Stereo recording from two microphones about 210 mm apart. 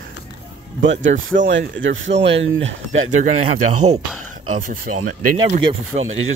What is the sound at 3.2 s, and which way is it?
Speech, 35° right (ahead or behind).